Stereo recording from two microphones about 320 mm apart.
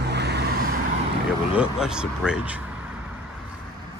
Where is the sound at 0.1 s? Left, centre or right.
Right.